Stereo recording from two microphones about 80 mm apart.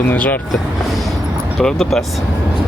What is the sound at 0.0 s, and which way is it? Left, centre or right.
Speech, left.